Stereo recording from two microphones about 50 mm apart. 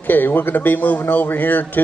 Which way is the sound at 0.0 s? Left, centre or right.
Left.